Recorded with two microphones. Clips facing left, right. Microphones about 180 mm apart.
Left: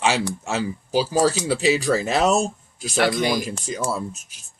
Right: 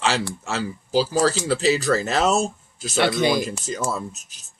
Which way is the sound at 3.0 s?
25° right (ahead or behind).